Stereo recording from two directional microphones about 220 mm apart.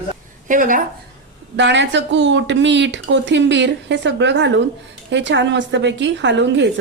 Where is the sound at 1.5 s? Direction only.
55° right (ahead or behind).